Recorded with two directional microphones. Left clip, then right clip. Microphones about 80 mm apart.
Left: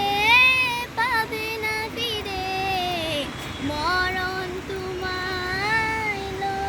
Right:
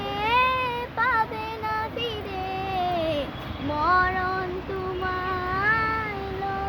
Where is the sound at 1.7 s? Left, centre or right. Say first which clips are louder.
Right 1 dB; right.